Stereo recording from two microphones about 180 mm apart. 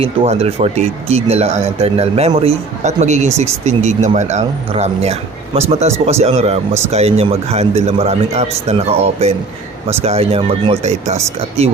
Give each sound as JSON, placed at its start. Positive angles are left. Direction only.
{"t": 0.0, "sound": "speech", "side_deg": -35}
{"t": 10.0, "sound": "speech", "side_deg": -35}